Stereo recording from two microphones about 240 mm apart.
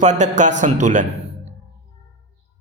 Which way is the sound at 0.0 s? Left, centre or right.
Right.